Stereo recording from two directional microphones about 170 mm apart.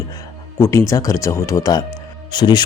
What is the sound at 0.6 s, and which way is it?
Speech, 15° left (ahead or behind).